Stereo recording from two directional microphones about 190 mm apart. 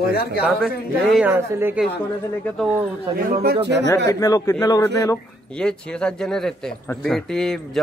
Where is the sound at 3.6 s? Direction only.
65° right (ahead or behind).